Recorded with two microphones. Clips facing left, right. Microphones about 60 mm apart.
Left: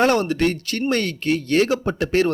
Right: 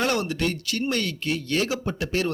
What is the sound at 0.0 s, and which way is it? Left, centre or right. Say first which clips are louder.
Speech: left 7 dB; left.